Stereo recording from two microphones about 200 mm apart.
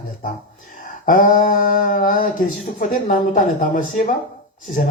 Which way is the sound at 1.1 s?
40° left (ahead or behind).